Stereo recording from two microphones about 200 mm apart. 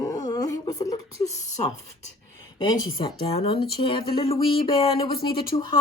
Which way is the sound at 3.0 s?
25° left (ahead or behind).